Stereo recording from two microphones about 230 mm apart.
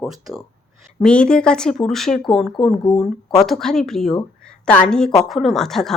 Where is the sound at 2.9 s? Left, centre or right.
Centre.